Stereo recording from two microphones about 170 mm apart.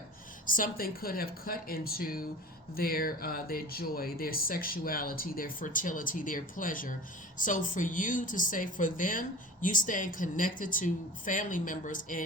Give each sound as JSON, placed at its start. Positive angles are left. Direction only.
{"t": 0.4, "sound": "speech", "side_deg": 55}